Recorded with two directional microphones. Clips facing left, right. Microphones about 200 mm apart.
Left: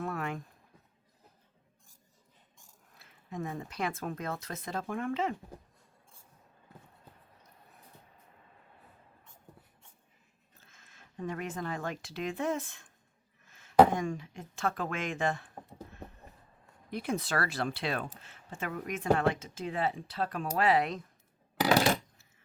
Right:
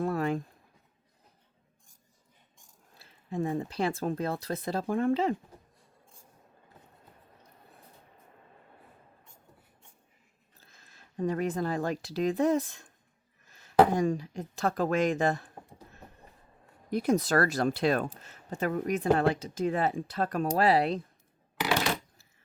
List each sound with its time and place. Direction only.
0.0 s a sound: 35° right (ahead or behind)
2.9 s speech: 30° right (ahead or behind)
10.6 s speech: 35° right (ahead or behind)
16.9 s speech: 40° right (ahead or behind)